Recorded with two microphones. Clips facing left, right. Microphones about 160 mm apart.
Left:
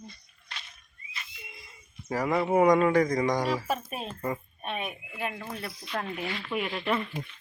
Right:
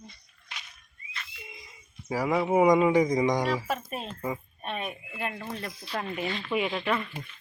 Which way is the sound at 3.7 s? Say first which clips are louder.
Left 1 dB; 10° left (ahead or behind).